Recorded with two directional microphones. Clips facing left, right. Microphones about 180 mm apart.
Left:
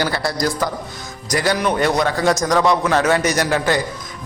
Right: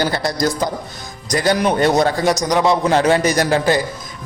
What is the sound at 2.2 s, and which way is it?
A man's voice, 15° right (ahead or behind).